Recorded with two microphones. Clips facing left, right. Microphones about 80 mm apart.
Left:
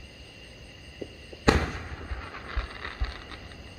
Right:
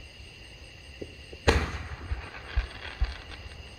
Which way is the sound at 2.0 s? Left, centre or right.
Left.